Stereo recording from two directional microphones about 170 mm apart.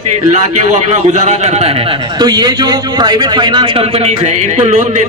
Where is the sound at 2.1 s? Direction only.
25° right (ahead or behind); by 5.0 s 45° right (ahead or behind).